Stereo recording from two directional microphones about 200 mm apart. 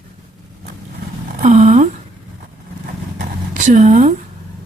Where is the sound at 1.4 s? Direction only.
40° right (ahead or behind).